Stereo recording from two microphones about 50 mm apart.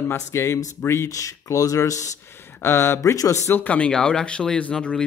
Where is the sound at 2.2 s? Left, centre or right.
Left.